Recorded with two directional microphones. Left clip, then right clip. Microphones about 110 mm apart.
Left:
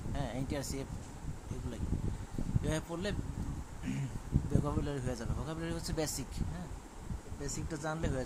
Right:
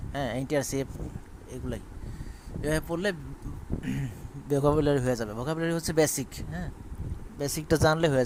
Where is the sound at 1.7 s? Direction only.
60° right (ahead or behind).